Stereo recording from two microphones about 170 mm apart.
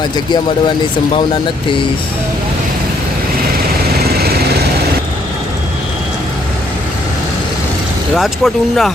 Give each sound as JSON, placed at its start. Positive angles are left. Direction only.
{"t": 4.2, "sound": "lawn mower", "side_deg": -65}
{"t": 8.1, "sound": "speech", "side_deg": 0}